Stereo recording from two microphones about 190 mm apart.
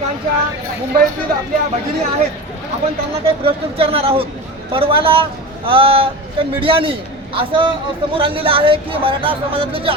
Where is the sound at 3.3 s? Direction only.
30° right (ahead or behind).